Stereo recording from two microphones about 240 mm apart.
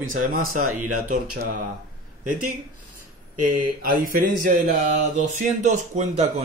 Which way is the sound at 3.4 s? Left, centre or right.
Right.